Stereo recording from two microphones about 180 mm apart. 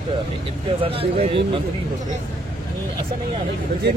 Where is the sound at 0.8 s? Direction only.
30° right (ahead or behind).